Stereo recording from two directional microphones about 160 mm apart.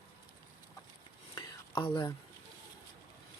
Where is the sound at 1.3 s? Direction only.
30° left (ahead or behind).